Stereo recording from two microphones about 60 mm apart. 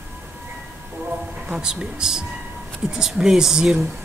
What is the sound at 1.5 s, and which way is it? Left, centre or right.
Speech, centre.